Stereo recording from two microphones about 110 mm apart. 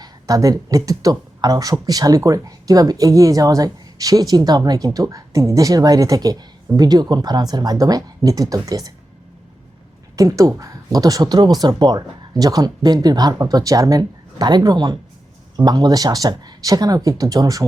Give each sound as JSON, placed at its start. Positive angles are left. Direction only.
{"t": 0.0, "sound": "speech", "side_deg": -30}
{"t": 10.2, "sound": "speech", "side_deg": -30}